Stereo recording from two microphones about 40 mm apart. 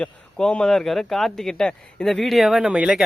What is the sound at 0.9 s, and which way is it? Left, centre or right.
Speech, centre.